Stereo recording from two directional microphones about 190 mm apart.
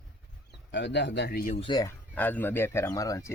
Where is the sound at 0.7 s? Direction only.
65° left (ahead or behind).